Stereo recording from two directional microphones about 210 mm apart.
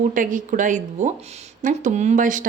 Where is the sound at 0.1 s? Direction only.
40° right (ahead or behind).